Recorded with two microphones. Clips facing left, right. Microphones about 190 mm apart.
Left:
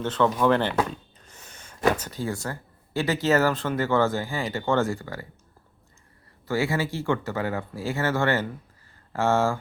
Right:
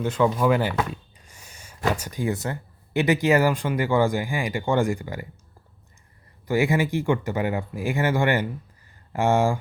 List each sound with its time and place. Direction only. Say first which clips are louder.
0.0 s speech: right 1 dB; 10° right (ahead or behind)
1.2 s a sound: left 1 dB; 10° right (ahead or behind)
2.0 s speech: right 4 dB; 15° right (ahead or behind)
6.5 s speech: right 4 dB; 15° right (ahead or behind)